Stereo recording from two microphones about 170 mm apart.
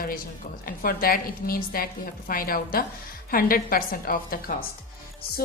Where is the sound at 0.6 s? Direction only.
60° left (ahead or behind).